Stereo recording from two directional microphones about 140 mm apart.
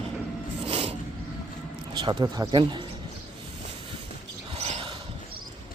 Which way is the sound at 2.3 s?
30° right (ahead or behind).